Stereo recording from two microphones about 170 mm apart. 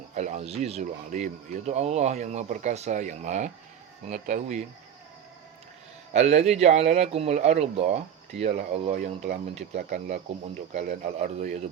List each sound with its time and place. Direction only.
0.1 s speech: 45° right (ahead or behind)
6.1 s speech: 40° right (ahead or behind)